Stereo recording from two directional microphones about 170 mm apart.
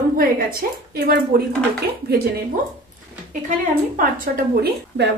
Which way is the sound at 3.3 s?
50° right (ahead or behind).